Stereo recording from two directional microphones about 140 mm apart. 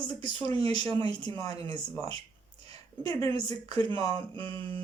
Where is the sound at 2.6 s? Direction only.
30° left (ahead or behind).